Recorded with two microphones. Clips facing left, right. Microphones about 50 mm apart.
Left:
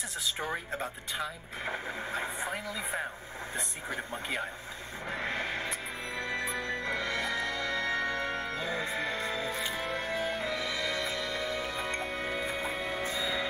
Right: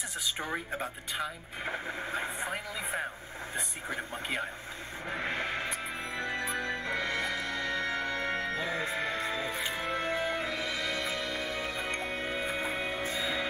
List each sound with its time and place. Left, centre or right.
0.4 s speech: centre
5.1 s music: centre; by 7.9 s right
8.6 s speech: centre
9.6 s music: centre
13.0 s music: right